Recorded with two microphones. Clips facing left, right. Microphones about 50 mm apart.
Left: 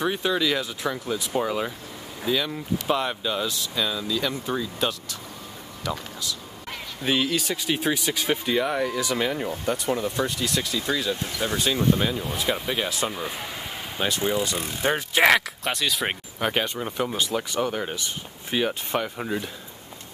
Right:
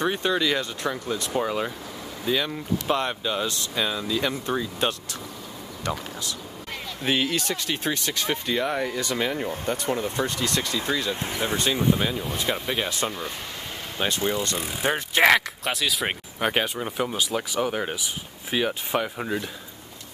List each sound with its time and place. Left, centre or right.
0.0 s speech: centre
3.7 s speech: centre
10.9 s speech: centre
11.1 s speech: right
11.5 s speech: centre